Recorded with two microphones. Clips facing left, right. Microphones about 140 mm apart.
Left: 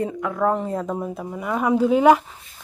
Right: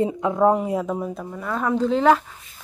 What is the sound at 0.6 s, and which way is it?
Speech, 5° right (ahead or behind).